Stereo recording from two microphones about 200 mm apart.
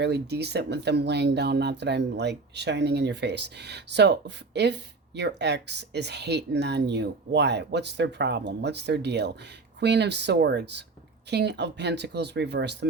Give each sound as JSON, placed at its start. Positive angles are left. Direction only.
{"t": 0.0, "sound": "speech", "side_deg": -55}